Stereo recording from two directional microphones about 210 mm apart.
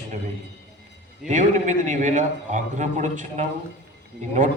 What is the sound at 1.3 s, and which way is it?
A man's voice, 35° right (ahead or behind).